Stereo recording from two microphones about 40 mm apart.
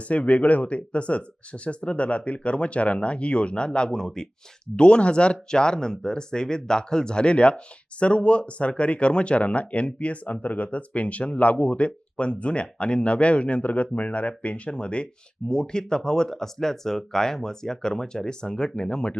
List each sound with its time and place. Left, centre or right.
0.1 s speech: left; by 4.3 s centre
4.8 s speech: left